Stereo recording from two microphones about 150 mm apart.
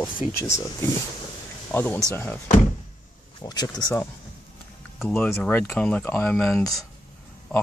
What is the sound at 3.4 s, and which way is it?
Speech, 30° left (ahead or behind).